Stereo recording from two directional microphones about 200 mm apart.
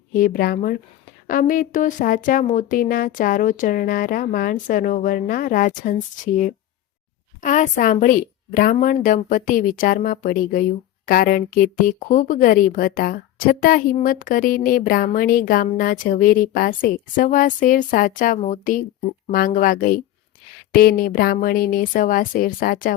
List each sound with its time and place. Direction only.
0.1 s speech: 45° left (ahead or behind)